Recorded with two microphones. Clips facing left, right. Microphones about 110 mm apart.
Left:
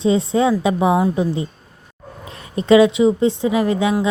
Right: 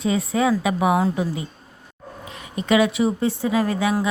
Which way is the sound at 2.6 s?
25° left (ahead or behind).